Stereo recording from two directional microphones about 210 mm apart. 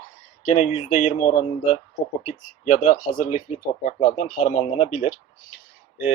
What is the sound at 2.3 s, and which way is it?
Speech, 30° left (ahead or behind).